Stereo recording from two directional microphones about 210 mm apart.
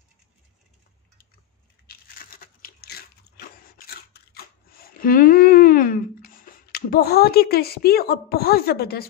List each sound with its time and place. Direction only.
1.9 s crunch: 45° left (ahead or behind)